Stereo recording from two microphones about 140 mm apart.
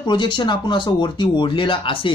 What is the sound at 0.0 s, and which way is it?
Speech, 35° left (ahead or behind).